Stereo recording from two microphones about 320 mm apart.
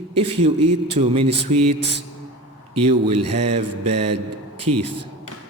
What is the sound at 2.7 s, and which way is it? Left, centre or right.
Speech, centre.